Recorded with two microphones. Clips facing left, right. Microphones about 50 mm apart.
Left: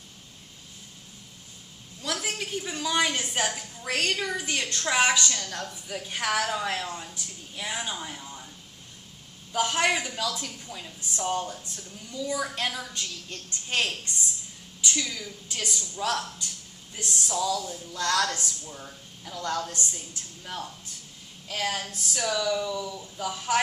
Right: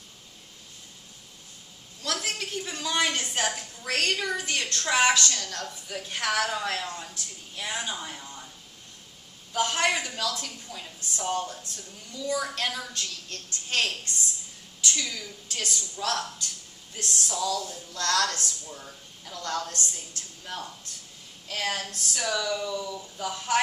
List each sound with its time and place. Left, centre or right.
2.0 s a woman's voice: centre
4.4 s a woman's voice: centre
9.5 s a woman's voice: centre
11.6 s a woman's voice: centre
12.4 s a woman's voice: centre
15.0 s speech: centre
15.4 s a woman's voice: centre
15.7 s a woman's voice: centre
21.5 s speech: centre